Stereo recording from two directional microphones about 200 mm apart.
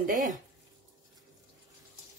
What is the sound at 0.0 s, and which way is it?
Speech, 40° right (ahead or behind).